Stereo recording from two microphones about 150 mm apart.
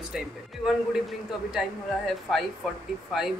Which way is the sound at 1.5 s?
Centre (ahead or behind).